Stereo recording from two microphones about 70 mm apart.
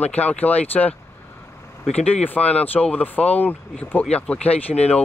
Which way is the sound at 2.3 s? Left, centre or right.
Left.